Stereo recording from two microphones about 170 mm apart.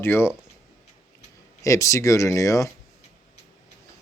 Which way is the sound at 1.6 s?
20° left (ahead or behind).